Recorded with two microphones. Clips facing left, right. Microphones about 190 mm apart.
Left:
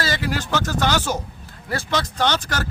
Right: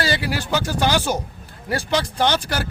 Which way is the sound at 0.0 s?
15° right (ahead or behind).